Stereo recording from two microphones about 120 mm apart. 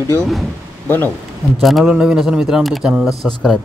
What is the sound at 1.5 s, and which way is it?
Speech, centre (ahead or behind).